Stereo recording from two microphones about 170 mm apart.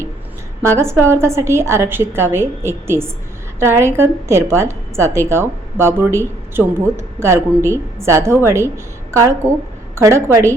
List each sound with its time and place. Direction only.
0.6 s a woman's voice: 15° right (ahead or behind)